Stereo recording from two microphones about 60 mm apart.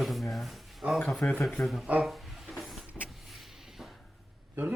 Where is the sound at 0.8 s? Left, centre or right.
Right.